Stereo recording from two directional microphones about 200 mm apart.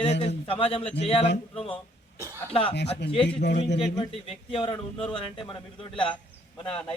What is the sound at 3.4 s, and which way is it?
Speech, 60° left (ahead or behind).